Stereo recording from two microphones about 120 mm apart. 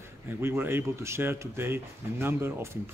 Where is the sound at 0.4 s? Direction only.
20° right (ahead or behind).